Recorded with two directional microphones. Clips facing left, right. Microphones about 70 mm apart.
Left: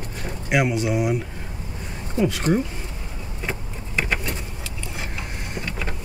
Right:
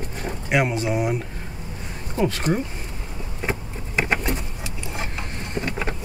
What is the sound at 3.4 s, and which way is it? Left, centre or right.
Vehicle, centre.